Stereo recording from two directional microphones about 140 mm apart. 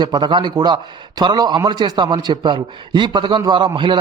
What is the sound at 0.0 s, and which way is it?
A man's voice, 30° right (ahead or behind).